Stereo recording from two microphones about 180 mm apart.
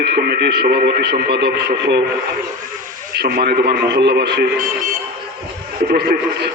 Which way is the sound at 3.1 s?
60° right (ahead or behind).